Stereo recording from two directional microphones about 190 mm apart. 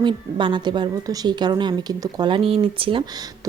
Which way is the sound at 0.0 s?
25° right (ahead or behind).